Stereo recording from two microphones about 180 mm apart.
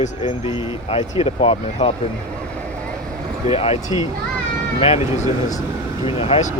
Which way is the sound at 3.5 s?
35° left (ahead or behind).